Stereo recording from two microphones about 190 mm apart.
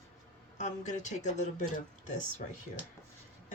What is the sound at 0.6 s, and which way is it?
Speech, 40° left (ahead or behind).